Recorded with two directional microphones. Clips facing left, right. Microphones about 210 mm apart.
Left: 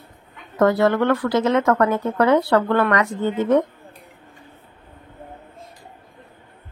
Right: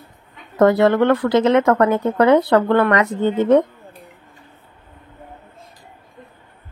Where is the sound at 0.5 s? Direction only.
20° right (ahead or behind).